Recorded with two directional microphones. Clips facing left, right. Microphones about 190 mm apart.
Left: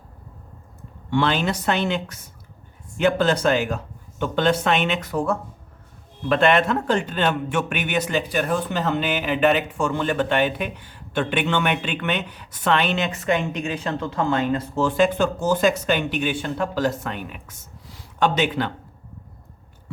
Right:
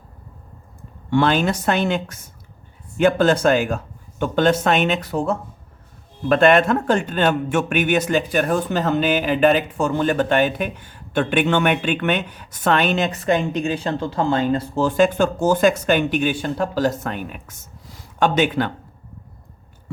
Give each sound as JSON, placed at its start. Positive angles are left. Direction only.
{"t": 1.1, "sound": "a man's voice", "side_deg": -45}
{"t": 6.2, "sound": "a man's voice", "side_deg": -45}